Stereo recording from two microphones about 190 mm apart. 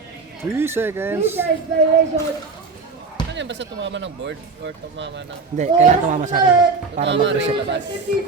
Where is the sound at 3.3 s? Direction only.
70° right (ahead or behind).